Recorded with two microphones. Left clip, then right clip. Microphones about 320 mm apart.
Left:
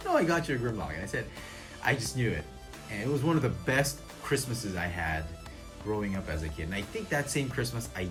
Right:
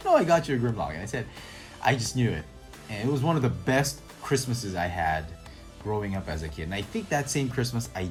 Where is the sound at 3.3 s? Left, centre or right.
Centre.